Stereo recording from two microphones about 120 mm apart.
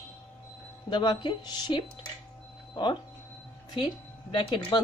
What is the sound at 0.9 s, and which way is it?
Speech, 40° left (ahead or behind).